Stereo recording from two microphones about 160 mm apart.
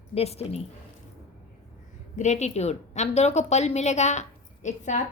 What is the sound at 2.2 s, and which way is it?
A woman's voice, 45° left (ahead or behind).